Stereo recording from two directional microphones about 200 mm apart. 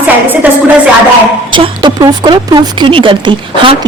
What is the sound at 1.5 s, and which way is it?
A woman's voice, 20° right (ahead or behind).